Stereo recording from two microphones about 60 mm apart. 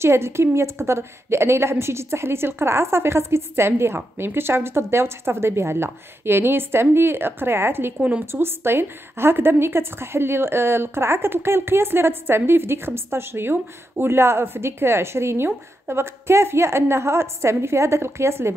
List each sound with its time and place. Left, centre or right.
0.0 s a woman's voice: right